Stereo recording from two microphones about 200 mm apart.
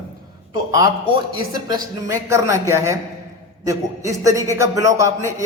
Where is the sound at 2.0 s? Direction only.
15° right (ahead or behind).